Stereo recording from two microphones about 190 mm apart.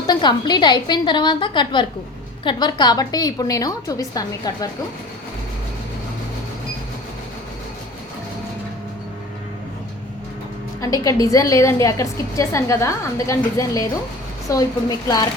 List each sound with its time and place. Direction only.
0.1 s a woman's voice: 20° left (ahead or behind)
10.8 s a woman's voice: 20° left (ahead or behind)